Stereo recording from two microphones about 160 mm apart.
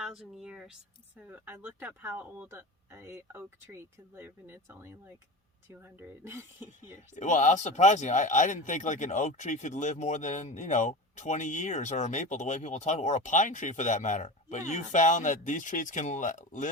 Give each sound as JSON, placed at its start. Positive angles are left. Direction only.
{"t": 0.0, "sound": "speech", "side_deg": -5}
{"t": 7.2, "sound": "speech", "side_deg": 50}